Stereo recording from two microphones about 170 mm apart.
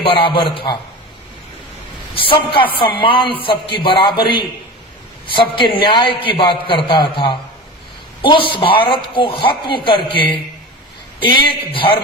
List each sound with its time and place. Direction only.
0.0 s a man's voice: 30° left (ahead or behind)
2.1 s a man's voice: 30° left (ahead or behind)